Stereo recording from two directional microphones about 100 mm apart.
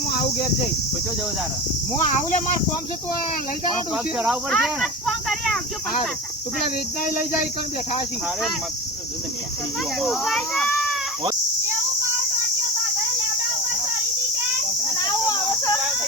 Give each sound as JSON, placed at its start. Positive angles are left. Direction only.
{"t": 4.4, "sound": "speech", "side_deg": 0}
{"t": 10.0, "sound": "speech", "side_deg": 5}